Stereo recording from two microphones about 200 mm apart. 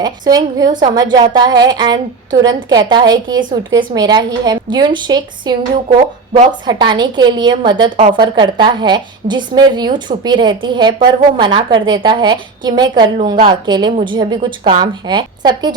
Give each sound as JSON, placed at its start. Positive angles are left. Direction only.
{"t": 0.0, "sound": "a woman's voice", "side_deg": -20}